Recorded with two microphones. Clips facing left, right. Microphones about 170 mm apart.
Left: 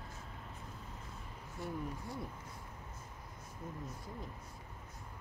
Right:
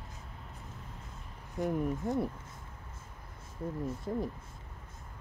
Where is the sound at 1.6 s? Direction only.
20° right (ahead or behind).